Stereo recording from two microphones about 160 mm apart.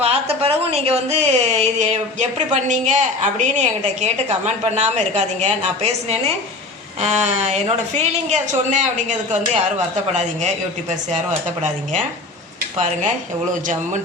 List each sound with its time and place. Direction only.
0.0 s a woman's voice: 35° right (ahead or behind)